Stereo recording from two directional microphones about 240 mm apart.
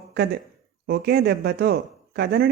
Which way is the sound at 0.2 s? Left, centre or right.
Right.